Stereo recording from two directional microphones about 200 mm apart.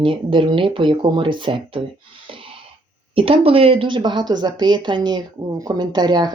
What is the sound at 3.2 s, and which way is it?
A woman's voice, 25° right (ahead or behind).